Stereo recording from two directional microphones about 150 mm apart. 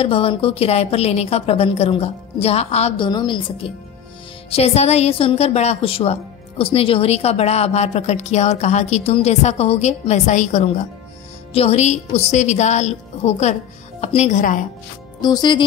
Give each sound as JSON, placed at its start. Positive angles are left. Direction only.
{"t": 0.0, "sound": "a woman's voice", "side_deg": 40}
{"t": 3.1, "sound": "a woman's voice", "side_deg": 30}
{"t": 15.2, "sound": "speech", "side_deg": 30}